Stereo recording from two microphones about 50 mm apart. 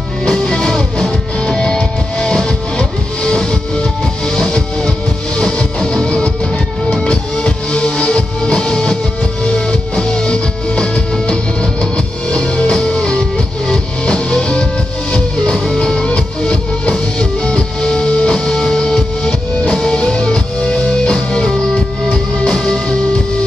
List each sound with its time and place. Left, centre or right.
0.2 s music: centre
16.1 s music: left